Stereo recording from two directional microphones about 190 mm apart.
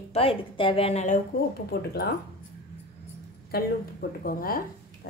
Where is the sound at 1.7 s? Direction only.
55° left (ahead or behind).